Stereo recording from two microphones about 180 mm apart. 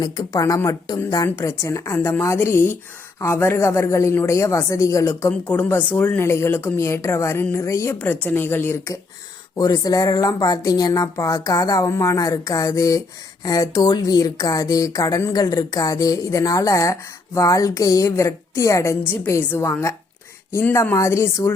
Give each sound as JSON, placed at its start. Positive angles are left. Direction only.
{"t": 0.0, "sound": "speech", "side_deg": 20}